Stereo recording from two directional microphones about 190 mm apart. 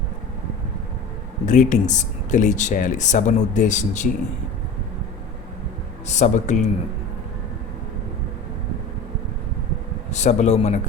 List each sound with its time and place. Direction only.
1.5 s speech: 40° left (ahead or behind)
6.1 s speech: 40° left (ahead or behind)
10.1 s speech: 40° left (ahead or behind)